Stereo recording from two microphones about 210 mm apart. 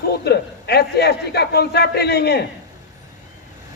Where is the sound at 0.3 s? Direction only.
50° left (ahead or behind).